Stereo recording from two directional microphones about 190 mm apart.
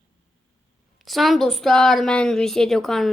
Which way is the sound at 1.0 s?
Centre (ahead or behind).